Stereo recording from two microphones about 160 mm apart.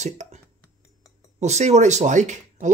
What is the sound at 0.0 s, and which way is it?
Speech, 45° right (ahead or behind).